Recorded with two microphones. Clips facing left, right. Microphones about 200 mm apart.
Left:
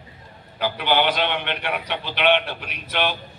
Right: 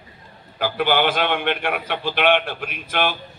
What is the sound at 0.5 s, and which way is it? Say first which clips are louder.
A man's voice: right 2 dB; 50° right (ahead or behind).